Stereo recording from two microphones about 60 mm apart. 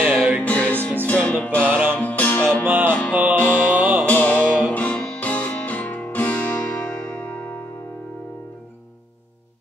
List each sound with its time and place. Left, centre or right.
0.0 s music: right
0.4 s music: left
1.6 s music: right
2.0 s music: left
2.6 s music: right
2.9 s music: left
3.6 s music: right
4.0 s music: left